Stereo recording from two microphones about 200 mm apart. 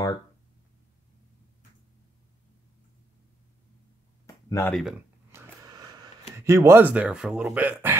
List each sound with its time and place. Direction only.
4.5 s speech: 10° left (ahead or behind)
4.7 s speech: centre (ahead or behind)
5.3 s a sound: 15° right (ahead or behind)
6.3 s speech: 15° right (ahead or behind)